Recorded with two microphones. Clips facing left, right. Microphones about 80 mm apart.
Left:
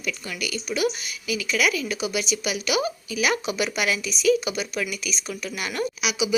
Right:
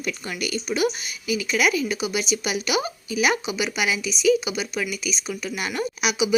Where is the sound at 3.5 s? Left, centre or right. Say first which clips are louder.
Even; centre.